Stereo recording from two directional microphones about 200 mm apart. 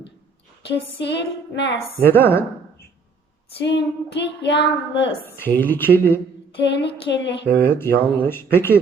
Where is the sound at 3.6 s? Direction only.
60° left (ahead or behind).